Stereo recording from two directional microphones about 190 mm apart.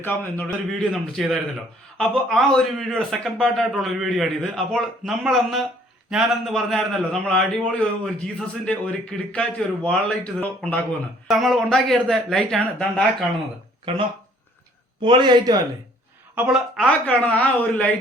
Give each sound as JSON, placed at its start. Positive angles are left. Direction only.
{"t": 0.0, "sound": "a man's voice", "side_deg": 10}
{"t": 15.0, "sound": "a man's voice", "side_deg": -25}
{"t": 16.3, "sound": "a woman's voice", "side_deg": -5}
{"t": 17.1, "sound": "speech", "side_deg": 5}